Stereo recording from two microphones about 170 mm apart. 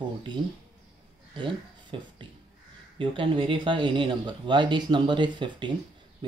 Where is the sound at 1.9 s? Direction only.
30° right (ahead or behind).